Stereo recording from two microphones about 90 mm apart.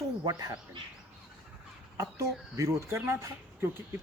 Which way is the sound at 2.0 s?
35° right (ahead or behind).